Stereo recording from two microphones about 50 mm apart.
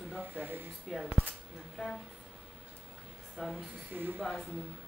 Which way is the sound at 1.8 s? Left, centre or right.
Centre.